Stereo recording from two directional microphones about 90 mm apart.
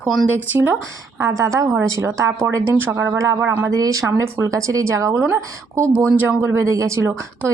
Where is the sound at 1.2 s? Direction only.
35° right (ahead or behind).